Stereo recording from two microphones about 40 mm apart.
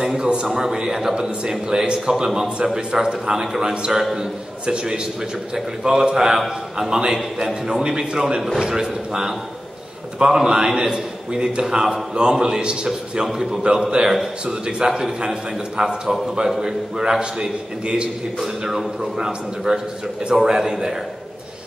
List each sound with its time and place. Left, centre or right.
0.0 s a man's voice: centre
0.5 s a man's voice: centre
14.9 s speech: centre
18.4 s speech: centre